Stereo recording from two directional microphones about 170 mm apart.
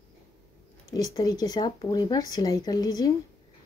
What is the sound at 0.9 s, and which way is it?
Speech, 20° left (ahead or behind).